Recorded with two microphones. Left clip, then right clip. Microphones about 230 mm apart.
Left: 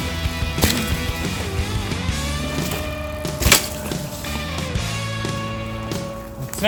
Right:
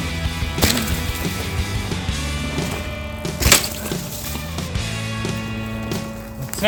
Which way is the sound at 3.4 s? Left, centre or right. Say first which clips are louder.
Right 1 dB; right.